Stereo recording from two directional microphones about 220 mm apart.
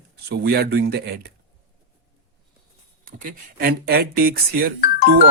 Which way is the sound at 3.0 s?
40° right (ahead or behind).